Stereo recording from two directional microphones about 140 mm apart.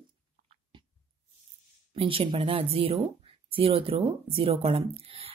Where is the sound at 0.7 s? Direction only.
35° right (ahead or behind).